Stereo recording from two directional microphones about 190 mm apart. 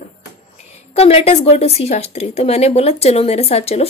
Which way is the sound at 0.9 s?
30° left (ahead or behind).